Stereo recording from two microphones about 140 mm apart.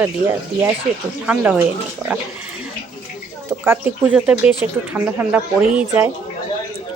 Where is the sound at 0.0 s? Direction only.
15° right (ahead or behind).